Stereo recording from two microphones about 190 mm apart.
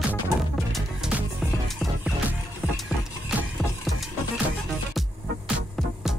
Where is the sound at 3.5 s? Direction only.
Centre (ahead or behind).